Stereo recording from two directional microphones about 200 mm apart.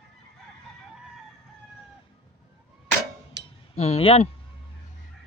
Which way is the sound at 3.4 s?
60° right (ahead or behind).